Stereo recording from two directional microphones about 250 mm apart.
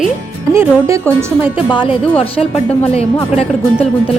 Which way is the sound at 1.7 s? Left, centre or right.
Centre.